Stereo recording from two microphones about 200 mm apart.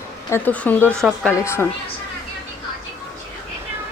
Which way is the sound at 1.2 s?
10° left (ahead or behind).